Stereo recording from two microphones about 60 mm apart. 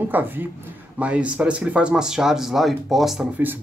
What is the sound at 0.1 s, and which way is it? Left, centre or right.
Speech, right.